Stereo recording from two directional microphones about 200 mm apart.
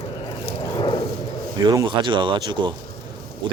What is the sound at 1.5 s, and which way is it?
Speech, 20° right (ahead or behind).